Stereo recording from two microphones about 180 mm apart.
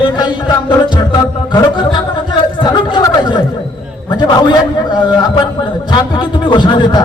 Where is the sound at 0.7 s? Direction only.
25° left (ahead or behind).